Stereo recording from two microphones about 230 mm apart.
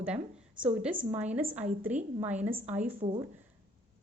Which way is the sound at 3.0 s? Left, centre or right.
Right.